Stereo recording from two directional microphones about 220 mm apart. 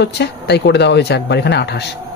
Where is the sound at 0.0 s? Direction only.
50° left (ahead or behind).